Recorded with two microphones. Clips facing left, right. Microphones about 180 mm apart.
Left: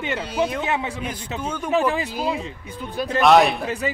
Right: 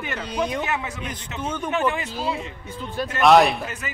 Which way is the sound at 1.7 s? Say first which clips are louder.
Left 4 dB; 35° left (ahead or behind).